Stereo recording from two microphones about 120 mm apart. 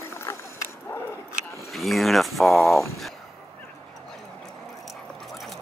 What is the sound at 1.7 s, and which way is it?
Speech, centre (ahead or behind).